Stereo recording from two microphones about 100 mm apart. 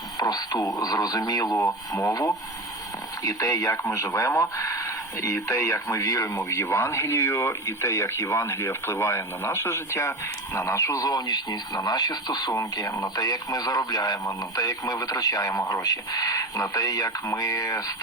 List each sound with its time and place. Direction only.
0.2 s speech: 40° left (ahead or behind)
1.5 s speech: 30° left (ahead or behind)